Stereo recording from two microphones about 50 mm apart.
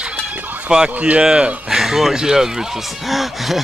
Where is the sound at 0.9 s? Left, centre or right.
Right.